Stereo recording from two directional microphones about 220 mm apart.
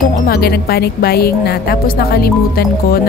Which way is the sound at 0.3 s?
45° left (ahead or behind).